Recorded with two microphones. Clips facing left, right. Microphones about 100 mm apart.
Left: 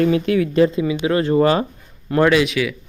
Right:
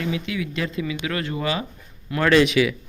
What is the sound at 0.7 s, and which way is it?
Speech, 25° left (ahead or behind).